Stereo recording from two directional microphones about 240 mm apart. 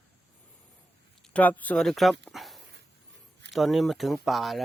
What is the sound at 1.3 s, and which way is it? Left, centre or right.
Speech, centre.